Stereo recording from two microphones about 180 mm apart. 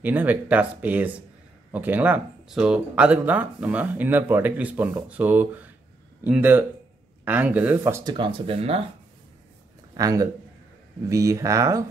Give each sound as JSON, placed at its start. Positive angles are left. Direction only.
{"t": 0.0, "sound": "speech", "side_deg": -10}
{"t": 9.9, "sound": "a man's voice", "side_deg": -20}